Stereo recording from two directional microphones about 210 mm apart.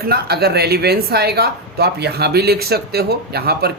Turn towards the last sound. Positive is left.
turn(degrees=-50)  # may be behind; listen again after turning